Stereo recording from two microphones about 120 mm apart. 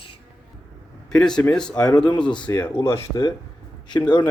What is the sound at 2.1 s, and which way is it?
Speech, 40° left (ahead or behind).